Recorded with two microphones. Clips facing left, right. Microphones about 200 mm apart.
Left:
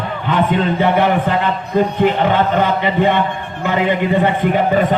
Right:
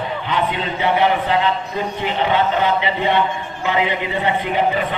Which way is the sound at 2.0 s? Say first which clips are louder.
Left 1 dB; 50° left (ahead or behind).